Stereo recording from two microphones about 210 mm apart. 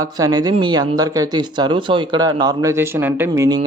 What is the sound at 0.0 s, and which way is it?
Speech, 15° right (ahead or behind).